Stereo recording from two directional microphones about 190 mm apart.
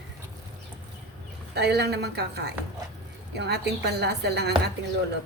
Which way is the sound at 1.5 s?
60° right (ahead or behind).